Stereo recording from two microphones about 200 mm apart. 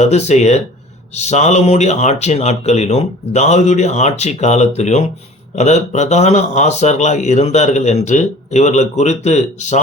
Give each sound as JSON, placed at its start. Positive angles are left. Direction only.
{"t": 0.0, "sound": "speech", "side_deg": 35}